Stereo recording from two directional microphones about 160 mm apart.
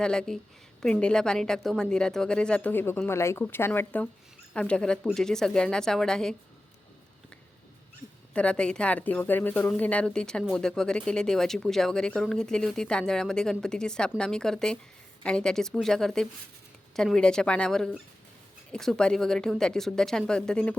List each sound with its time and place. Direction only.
0.0 s speech: 5° left (ahead or behind)
8.3 s speech: 5° left (ahead or behind)